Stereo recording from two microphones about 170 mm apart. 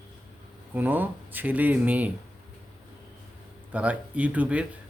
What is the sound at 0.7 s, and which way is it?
Speech, 10° right (ahead or behind).